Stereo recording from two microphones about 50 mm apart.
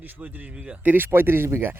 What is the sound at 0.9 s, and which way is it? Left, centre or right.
Speech, right.